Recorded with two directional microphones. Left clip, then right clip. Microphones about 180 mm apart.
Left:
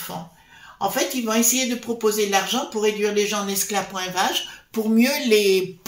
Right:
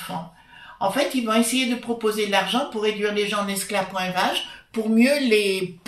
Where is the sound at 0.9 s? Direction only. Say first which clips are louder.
Right 1 dB; 45° left (ahead or behind).